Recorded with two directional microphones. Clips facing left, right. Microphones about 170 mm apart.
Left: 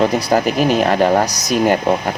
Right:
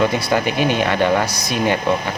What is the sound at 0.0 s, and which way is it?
Speech, 40° left (ahead or behind).